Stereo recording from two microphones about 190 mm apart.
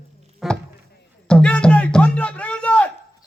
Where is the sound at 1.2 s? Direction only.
5° left (ahead or behind).